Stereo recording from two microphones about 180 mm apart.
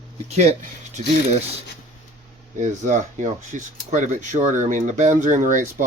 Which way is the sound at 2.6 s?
40° right (ahead or behind).